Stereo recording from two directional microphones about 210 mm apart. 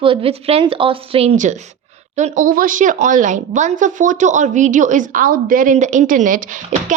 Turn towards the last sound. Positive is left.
turn(degrees=-40)  # may be behind; listen again after turning